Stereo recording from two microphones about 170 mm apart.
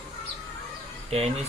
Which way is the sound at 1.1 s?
35° right (ahead or behind).